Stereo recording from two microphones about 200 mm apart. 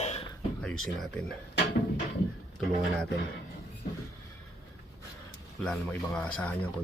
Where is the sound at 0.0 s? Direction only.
30° left (ahead or behind).